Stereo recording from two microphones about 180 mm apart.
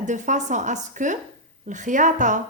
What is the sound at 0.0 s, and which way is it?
A woman's voice, 40° right (ahead or behind).